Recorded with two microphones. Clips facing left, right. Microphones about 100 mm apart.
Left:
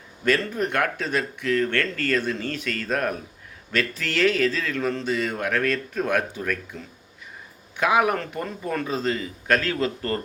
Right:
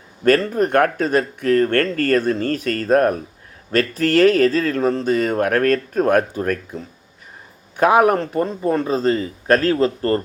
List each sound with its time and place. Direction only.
0.3 s speech: 45° right (ahead or behind)